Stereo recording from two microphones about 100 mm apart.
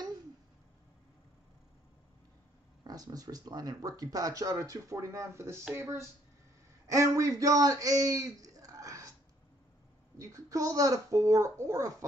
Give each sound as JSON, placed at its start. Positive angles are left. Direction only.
{"t": 2.8, "sound": "a man's voice", "side_deg": -40}
{"t": 10.1, "sound": "speech", "side_deg": -35}